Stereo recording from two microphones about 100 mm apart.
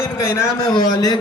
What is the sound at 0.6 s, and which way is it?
Speech, 45° left (ahead or behind).